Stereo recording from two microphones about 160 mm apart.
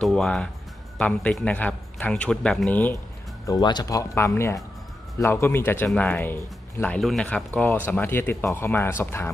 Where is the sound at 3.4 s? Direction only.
25° left (ahead or behind).